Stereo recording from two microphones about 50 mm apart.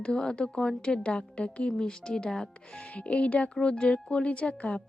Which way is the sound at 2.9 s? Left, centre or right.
Left.